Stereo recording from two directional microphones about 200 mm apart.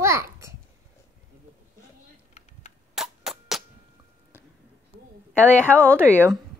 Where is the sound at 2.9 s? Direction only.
Centre (ahead or behind).